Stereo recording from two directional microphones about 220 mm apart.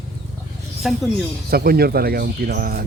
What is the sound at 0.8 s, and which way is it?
Speech, centre (ahead or behind).